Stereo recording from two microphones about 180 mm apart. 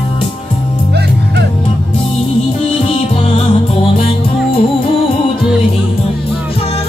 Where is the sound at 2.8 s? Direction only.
30° left (ahead or behind).